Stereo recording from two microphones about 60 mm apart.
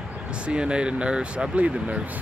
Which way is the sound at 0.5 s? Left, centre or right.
Centre.